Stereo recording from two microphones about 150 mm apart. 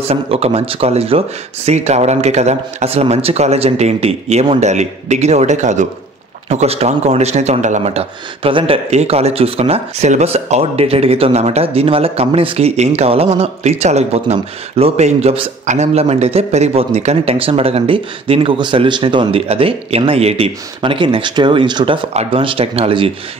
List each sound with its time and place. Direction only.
0.1 s a man's voice: 40° right (ahead or behind)
15.6 s a man's voice: 50° right (ahead or behind)